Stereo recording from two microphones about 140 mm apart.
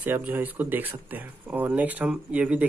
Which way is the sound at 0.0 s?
15° right (ahead or behind).